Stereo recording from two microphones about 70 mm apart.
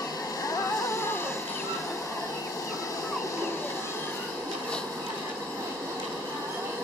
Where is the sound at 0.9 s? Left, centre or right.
Left.